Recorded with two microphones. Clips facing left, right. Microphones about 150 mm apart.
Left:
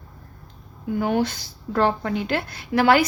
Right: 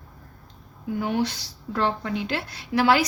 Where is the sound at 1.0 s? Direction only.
50° left (ahead or behind).